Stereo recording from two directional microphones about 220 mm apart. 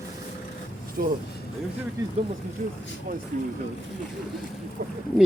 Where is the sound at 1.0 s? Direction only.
40° right (ahead or behind).